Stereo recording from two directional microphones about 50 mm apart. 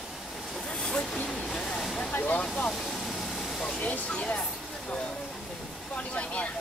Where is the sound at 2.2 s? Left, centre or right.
Left.